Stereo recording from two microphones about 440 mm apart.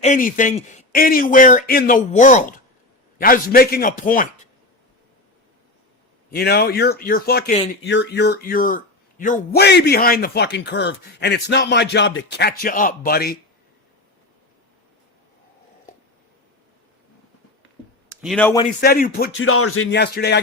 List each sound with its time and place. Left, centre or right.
0.0 s speech: centre
6.3 s speech: left
18.1 s speech: centre; by 20.4 s left